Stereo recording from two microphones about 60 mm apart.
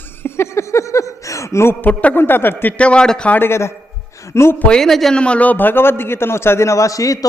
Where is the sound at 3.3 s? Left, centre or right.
Left.